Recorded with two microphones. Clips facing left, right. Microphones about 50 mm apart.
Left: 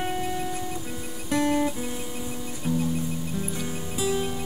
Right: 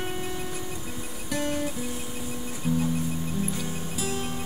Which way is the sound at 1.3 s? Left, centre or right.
Left.